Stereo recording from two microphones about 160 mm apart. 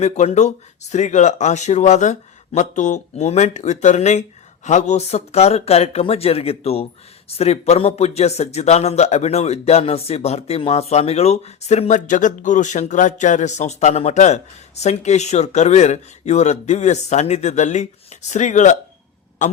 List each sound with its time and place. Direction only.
0.0 s a man's voice: 45° left (ahead or behind)